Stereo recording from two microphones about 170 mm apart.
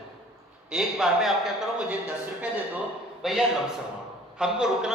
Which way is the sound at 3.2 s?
Centre (ahead or behind).